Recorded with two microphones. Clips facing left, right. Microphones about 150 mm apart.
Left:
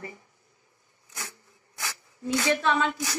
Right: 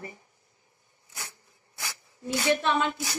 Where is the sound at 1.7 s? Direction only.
20° right (ahead or behind).